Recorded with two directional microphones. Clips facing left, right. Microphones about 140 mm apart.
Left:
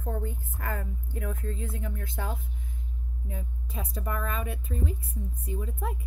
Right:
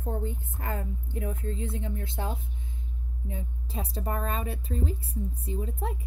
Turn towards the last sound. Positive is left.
turn(degrees=-30)  # may be behind; listen again after turning